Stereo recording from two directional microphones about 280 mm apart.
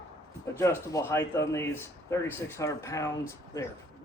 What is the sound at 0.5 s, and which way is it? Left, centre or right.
Speech, centre.